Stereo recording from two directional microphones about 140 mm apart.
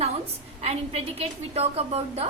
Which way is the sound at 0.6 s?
45° right (ahead or behind).